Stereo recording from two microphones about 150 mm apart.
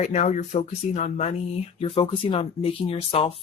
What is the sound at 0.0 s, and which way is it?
Speech, 50° left (ahead or behind).